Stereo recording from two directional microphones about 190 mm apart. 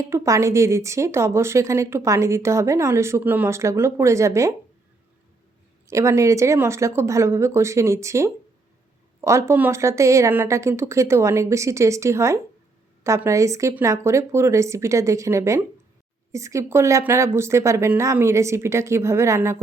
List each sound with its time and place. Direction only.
0.0 s a woman's voice: 15° right (ahead or behind)
5.9 s a woman's voice: 15° right (ahead or behind)